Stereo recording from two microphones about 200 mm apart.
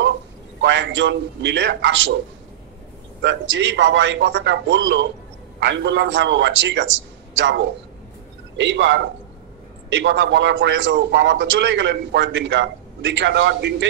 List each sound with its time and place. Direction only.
0.6 s a man's voice: 60° right (ahead or behind)
3.2 s a man's voice: 65° right (ahead or behind)